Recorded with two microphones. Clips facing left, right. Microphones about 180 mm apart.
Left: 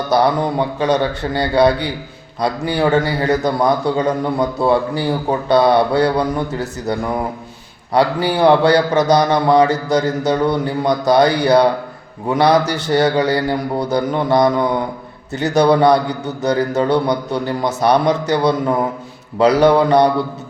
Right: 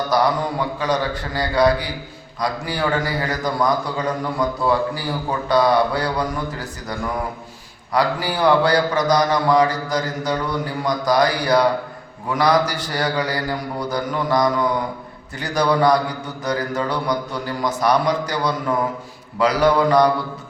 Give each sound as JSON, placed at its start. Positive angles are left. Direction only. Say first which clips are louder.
{"t": 0.1, "sound": "a man's voice", "louder": "left 6 dB", "side_deg": 25}
{"t": 7.9, "sound": "a man's voice", "louder": "left 5 dB", "side_deg": 30}